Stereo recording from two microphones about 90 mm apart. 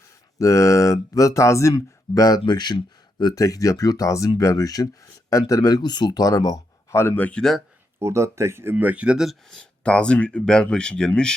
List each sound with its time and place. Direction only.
0.3 s speech: 35° left (ahead or behind)
1.7 s speech: 45° left (ahead or behind)
2.5 s speech: 55° left (ahead or behind)
6.9 s speech: 30° left (ahead or behind)
7.3 s speech: 5° left (ahead or behind)
7.9 s speech: 30° right (ahead or behind)
8.7 s speech: 15° right (ahead or behind); by 11.3 s 10° left (ahead or behind)